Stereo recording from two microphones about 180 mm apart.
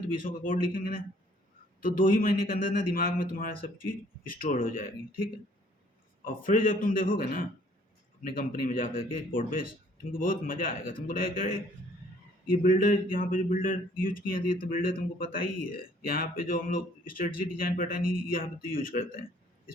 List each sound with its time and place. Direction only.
0.1 s a man's voice: 50° left (ahead or behind)
4.5 s a man's voice: 50° left (ahead or behind)
6.2 s a man's voice: 50° left (ahead or behind)
12.6 s a man's voice: 50° left (ahead or behind)